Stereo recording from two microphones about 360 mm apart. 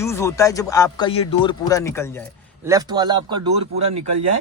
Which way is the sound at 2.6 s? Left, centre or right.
Centre.